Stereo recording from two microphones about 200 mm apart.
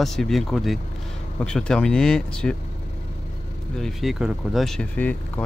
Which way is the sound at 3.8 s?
Centre (ahead or behind).